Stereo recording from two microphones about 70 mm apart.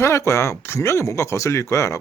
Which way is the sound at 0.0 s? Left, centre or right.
Left.